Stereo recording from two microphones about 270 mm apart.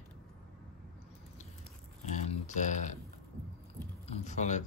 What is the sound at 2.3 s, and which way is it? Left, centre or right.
Speech, left.